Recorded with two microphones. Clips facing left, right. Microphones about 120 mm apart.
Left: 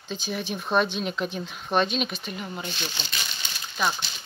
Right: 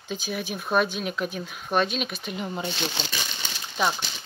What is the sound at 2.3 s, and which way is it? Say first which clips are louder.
Speech: right 6 dB; 25° right (ahead or behind).